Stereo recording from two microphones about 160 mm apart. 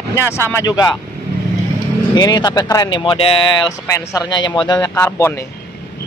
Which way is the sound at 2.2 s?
25° left (ahead or behind).